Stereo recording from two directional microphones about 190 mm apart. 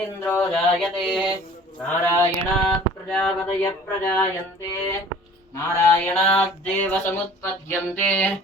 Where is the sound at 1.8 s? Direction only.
10° left (ahead or behind).